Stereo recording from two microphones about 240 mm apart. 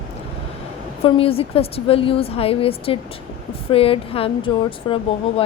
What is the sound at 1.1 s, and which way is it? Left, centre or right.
Speech, left.